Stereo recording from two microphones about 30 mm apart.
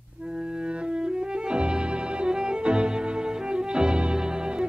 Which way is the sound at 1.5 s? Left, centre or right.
Right.